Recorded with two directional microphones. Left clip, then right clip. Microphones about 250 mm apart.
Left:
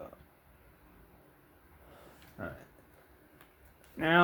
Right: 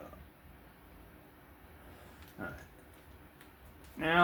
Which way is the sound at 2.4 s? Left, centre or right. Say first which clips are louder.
Left 1 dB; left.